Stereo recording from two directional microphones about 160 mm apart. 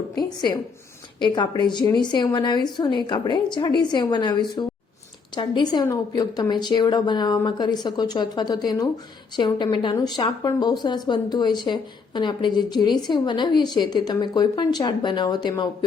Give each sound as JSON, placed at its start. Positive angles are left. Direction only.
{"t": 0.2, "sound": "a woman's voice", "side_deg": 25}